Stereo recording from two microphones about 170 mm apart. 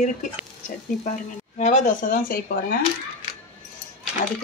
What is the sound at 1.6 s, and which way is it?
Speech, 45° left (ahead or behind).